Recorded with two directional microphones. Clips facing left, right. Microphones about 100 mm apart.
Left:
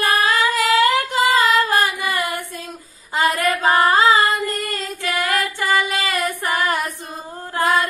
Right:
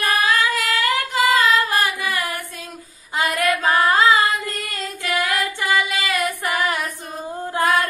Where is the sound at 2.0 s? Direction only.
30° left (ahead or behind).